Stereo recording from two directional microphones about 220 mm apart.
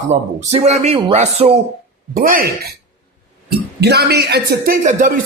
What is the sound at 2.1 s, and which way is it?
Speech, 40° right (ahead or behind).